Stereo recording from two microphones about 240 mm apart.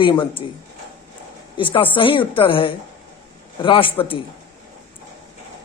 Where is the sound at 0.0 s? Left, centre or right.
Left.